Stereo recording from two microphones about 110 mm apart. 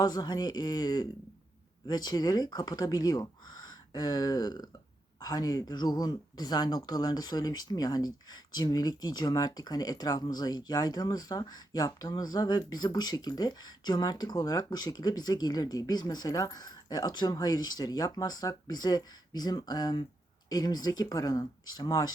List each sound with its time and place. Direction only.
0.0 s speech: 40° left (ahead or behind)